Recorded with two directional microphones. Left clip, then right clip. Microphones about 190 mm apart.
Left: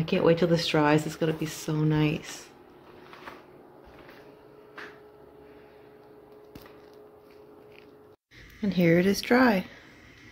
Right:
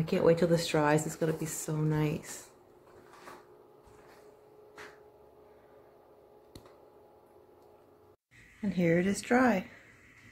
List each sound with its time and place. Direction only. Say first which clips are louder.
0.0 s speech: left 3 dB; centre (ahead or behind)
8.6 s a woman's voice: left 6 dB; 15° left (ahead or behind)